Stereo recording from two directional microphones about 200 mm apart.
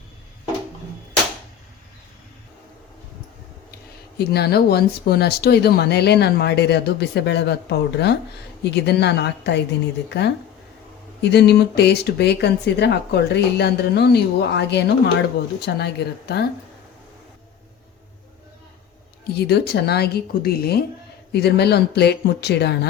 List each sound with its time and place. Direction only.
4.2 s speech: 55° left (ahead or behind)
19.3 s speech: 55° left (ahead or behind)